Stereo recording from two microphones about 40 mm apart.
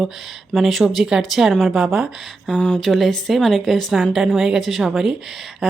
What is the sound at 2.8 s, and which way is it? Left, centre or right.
Speech, centre.